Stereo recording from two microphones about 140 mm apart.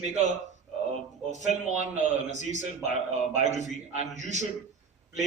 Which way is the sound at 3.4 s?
55° right (ahead or behind).